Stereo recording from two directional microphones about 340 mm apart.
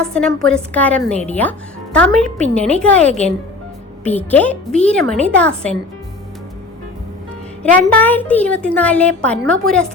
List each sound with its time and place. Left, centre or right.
0.0 s a woman's voice: centre
1.1 s speech: centre
1.4 s a woman's voice: centre
4.0 s a woman's voice: centre
7.6 s a woman's voice: centre